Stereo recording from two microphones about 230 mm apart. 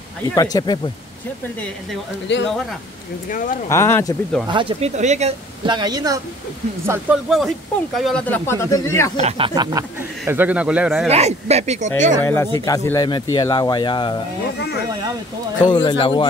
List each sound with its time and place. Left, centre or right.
0.3 s speech: centre
2.3 s speech: left
3.3 s speech: left
3.6 s speech: centre
4.5 s speech: right
6.9 s speech: centre
9.1 s speech: right; by 11.1 s centre
11.1 s speech: right
12.2 s speech: centre
14.6 s speech: left
15.6 s speech: centre